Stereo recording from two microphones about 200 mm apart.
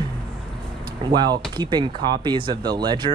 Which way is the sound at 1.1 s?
20° right (ahead or behind).